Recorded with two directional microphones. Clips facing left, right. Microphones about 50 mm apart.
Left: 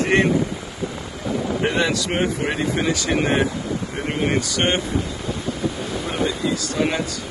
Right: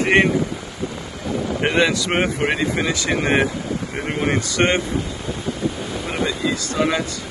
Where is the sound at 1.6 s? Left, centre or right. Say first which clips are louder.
Right 4 dB; right.